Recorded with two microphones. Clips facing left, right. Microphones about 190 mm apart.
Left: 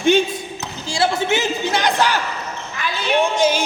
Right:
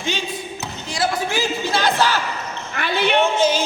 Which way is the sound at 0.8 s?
30° left (ahead or behind).